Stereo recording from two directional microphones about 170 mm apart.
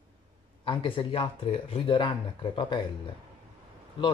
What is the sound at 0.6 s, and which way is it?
Speech, 30° left (ahead or behind).